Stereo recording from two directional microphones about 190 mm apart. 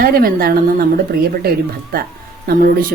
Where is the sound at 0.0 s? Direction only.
50° right (ahead or behind).